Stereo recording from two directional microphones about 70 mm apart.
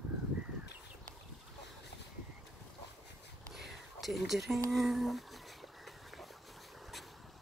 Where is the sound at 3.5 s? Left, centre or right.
Centre.